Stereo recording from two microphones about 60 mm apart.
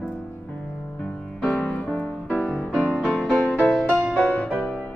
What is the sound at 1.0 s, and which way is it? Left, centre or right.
Music, left.